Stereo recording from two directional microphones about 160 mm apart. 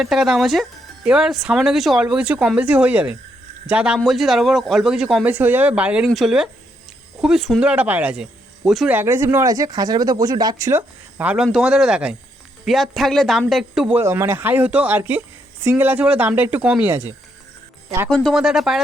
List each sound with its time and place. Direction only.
0.0 s speech: 5° right (ahead or behind)
8.9 s speech: 15° right (ahead or behind)
14.0 s speech: 15° right (ahead or behind)
18.1 s speech: 5° left (ahead or behind)